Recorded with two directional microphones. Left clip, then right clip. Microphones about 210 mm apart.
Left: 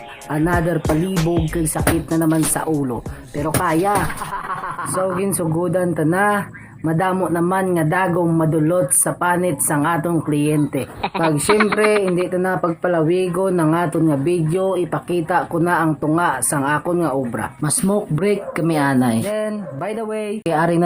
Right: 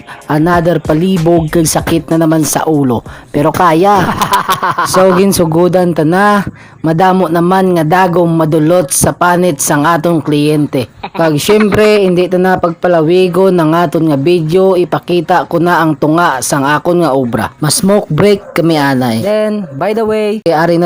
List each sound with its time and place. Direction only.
0.3 s a man's voice: 45° right (ahead or behind)
1.1 s speech: centre (ahead or behind)
1.5 s a man's voice: 45° right (ahead or behind)
11.4 s speech: centre (ahead or behind)
12.1 s speech: 40° right (ahead or behind)
19.4 s a man's voice: 40° right (ahead or behind)
20.4 s speech: 25° right (ahead or behind)